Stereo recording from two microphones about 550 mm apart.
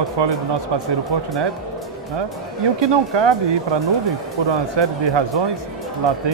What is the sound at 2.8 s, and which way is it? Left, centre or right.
Speech, right.